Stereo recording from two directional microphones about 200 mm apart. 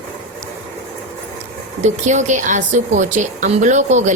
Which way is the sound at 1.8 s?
35° right (ahead or behind).